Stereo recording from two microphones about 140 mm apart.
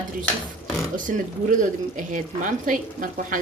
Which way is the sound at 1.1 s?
70° right (ahead or behind).